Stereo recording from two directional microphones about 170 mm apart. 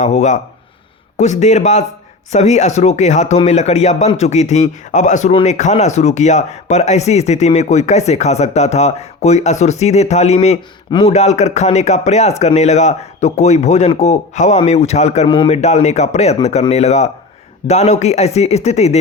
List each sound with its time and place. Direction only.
0.0 s speech: 45° left (ahead or behind)